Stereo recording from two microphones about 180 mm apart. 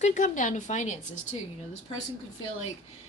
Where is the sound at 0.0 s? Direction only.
45° left (ahead or behind).